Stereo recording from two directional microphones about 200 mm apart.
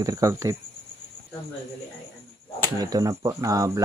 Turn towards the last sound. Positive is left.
turn(degrees=-15)  # may be behind; listen again after turning